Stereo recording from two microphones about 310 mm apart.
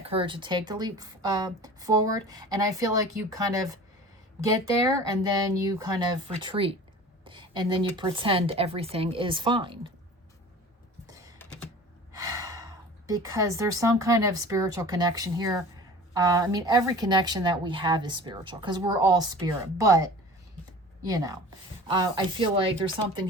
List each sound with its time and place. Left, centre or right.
0.0 s speech: centre
12.1 s gasp: centre
13.1 s speech: centre
21.1 s speech: centre